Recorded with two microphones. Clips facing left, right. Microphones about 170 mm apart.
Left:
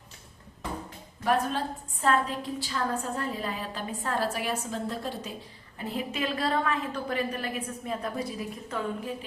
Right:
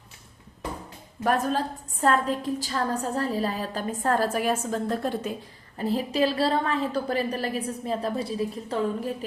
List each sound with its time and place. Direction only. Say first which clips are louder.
1.2 s a woman's voice: right 3 dB; 45° right (ahead or behind)
5.7 s a woman's voice: right 7 dB; 35° right (ahead or behind)